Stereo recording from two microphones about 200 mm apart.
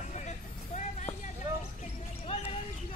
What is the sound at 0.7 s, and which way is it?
Music, 35° left (ahead or behind).